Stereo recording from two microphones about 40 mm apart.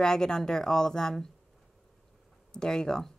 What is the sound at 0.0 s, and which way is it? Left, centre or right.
A woman's voice, centre.